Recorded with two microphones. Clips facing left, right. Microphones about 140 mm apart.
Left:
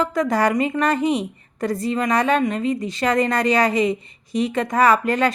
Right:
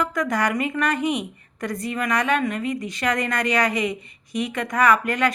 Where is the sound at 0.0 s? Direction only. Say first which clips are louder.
Left 4 dB; 30° left (ahead or behind).